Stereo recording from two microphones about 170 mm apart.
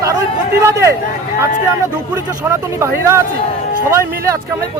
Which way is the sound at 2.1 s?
15° right (ahead or behind).